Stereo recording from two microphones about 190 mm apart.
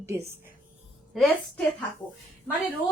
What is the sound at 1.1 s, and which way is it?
Speech, centre (ahead or behind).